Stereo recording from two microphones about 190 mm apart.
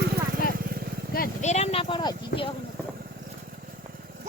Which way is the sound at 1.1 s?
35° left (ahead or behind).